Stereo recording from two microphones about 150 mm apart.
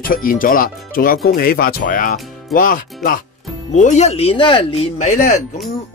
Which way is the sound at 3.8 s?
50° left (ahead or behind).